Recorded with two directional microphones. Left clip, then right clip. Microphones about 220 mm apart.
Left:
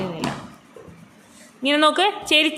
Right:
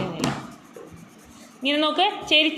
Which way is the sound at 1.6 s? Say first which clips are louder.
Left 4 dB; 25° left (ahead or behind).